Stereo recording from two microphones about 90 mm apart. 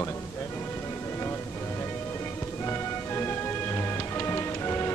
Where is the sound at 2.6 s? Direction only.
25° left (ahead or behind).